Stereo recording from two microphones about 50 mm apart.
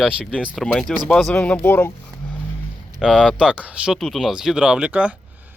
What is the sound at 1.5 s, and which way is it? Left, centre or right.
Speech, left.